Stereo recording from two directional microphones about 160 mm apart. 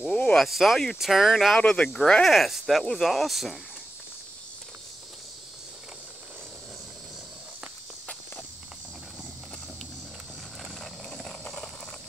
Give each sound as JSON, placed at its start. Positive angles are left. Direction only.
{"t": 0.0, "sound": "speech", "side_deg": 5}
{"t": 10.8, "sound": "vehicle", "side_deg": 5}